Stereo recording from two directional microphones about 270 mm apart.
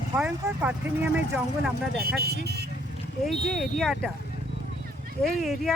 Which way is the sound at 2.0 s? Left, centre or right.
Right.